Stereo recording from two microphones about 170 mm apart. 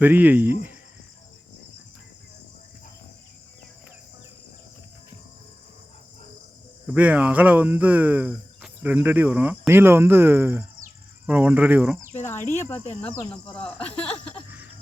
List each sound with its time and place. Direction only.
0.0 s speech: 10° right (ahead or behind)
6.8 s speech: 10° right (ahead or behind)
12.5 s speech: 15° left (ahead or behind)
13.8 s speech: 35° left (ahead or behind)